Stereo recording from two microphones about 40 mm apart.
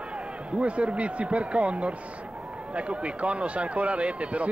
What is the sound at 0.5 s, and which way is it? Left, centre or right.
A man's voice, right.